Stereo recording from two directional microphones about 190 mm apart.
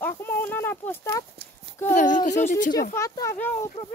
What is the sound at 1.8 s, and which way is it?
Speech, 40° left (ahead or behind).